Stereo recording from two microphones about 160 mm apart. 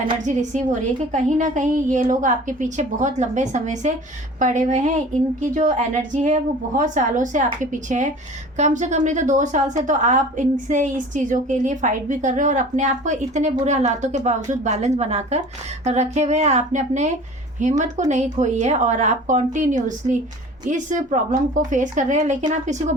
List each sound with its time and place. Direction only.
0.3 s a woman's voice: 50° right (ahead or behind)